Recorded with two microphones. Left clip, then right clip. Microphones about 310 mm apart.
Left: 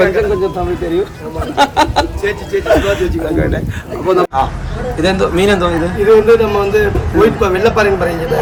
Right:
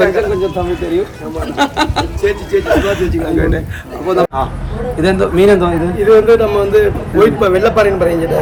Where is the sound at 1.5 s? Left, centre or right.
Centre.